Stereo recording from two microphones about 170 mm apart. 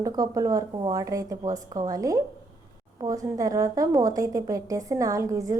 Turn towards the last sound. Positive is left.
turn(degrees=-20)  # may be behind; listen again after turning